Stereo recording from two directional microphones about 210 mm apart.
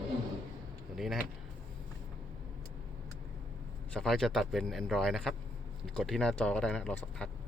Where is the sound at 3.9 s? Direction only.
Centre (ahead or behind).